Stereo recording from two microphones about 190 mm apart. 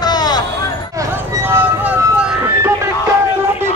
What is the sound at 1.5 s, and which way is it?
Music, 10° right (ahead or behind).